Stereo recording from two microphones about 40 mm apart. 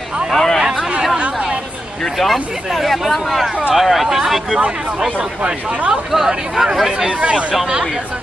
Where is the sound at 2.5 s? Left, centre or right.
Centre.